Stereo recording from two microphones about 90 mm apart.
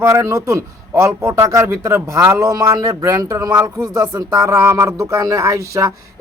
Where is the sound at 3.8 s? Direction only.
50° right (ahead or behind).